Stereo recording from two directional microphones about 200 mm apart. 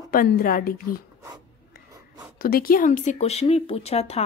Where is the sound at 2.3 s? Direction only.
50° left (ahead or behind); by 4.2 s 30° left (ahead or behind).